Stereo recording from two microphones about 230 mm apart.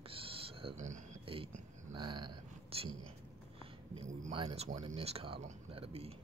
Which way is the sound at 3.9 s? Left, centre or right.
Right.